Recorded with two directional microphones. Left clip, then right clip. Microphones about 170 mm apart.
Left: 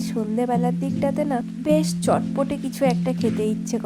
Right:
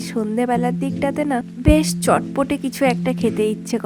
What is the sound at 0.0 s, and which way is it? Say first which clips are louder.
Speech: right 3 dB; 25° right (ahead or behind).